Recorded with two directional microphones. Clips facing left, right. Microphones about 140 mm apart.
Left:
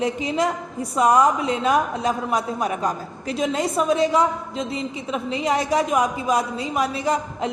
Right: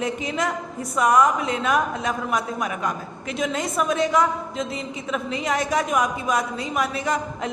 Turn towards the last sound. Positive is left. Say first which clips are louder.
# left 2 dB
turn(degrees=30)  # may be behind; listen again after turning